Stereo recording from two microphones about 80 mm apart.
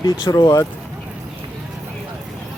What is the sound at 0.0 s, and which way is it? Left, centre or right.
Speech, left.